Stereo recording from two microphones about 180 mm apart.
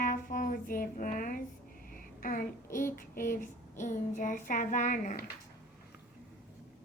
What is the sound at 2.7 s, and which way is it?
Child singing, 50° left (ahead or behind).